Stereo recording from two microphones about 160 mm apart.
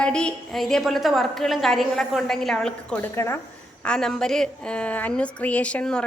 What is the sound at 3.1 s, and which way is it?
Speech, 15° left (ahead or behind).